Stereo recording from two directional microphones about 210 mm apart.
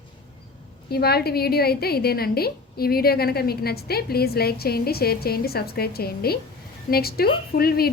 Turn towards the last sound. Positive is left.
turn(degrees=45)  # may be behind; listen again after turning